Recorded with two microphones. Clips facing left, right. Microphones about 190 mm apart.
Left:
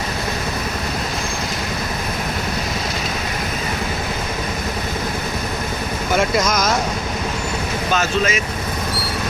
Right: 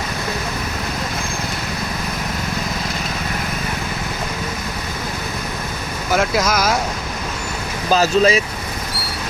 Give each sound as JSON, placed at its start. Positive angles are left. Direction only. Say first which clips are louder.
{"t": 6.1, "sound": "speech", "louder": "even", "side_deg": -5}
{"t": 7.9, "sound": "speech", "louder": "right 6 dB", "side_deg": -35}